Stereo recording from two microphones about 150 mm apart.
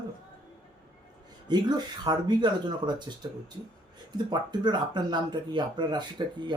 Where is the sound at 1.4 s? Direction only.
30° right (ahead or behind).